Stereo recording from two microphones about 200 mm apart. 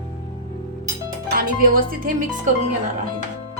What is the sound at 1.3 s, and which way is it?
Speech, 45° right (ahead or behind).